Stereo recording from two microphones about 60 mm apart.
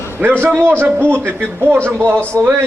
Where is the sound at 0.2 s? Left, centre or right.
Right.